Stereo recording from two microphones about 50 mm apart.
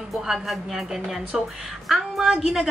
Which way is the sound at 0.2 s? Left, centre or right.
Centre.